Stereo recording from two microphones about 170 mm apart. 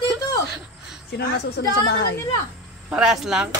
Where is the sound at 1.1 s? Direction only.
85° left.